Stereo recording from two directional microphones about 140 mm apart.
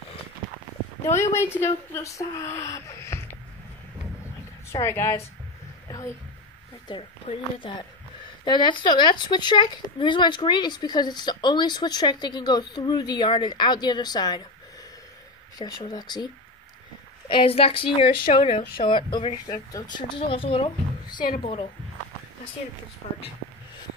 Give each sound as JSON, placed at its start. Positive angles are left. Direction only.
{"t": 1.2, "sound": "speech", "side_deg": 20}
{"t": 4.7, "sound": "a woman's voice", "side_deg": 15}
{"t": 5.9, "sound": "a sound", "side_deg": 25}
{"t": 7.5, "sound": "speech", "side_deg": 35}
{"t": 15.6, "sound": "speech", "side_deg": 30}
{"t": 17.3, "sound": "a woman's voice", "side_deg": 40}
{"t": 23.0, "sound": "speech", "side_deg": 65}